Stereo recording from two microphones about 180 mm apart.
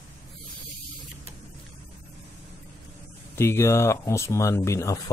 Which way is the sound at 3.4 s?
15° left (ahead or behind).